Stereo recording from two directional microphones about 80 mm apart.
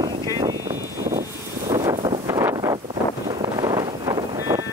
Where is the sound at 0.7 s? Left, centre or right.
Right.